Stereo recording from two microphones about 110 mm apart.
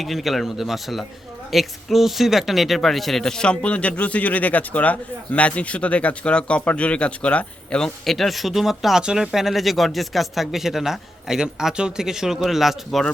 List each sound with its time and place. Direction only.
0.0 s speech: centre (ahead or behind)